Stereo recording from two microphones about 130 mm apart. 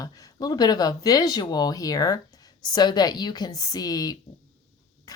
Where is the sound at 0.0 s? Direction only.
30° left (ahead or behind).